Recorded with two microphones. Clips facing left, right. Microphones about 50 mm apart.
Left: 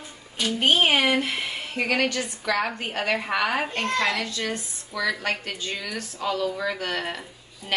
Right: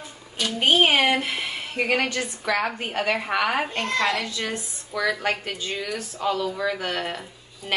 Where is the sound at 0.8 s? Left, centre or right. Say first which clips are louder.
Right 1 dB; right; by 5.1 s centre.